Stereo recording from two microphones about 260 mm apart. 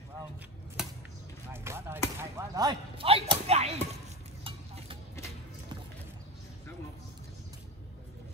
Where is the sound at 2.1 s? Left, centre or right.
Centre.